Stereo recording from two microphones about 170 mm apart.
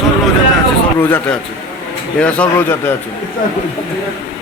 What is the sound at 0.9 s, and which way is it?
A man's voice, 10° left (ahead or behind).